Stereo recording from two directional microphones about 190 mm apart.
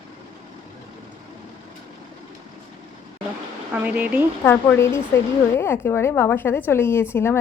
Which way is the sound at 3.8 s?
5° right (ahead or behind).